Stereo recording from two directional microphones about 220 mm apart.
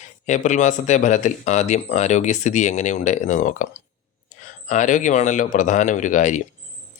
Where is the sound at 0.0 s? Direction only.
35° left (ahead or behind).